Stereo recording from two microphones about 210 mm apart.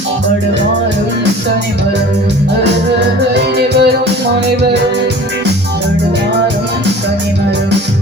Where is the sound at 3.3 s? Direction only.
50° right (ahead or behind).